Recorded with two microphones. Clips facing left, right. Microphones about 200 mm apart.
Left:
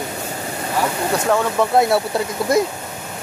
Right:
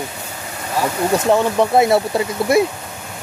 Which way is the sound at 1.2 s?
20° right (ahead or behind).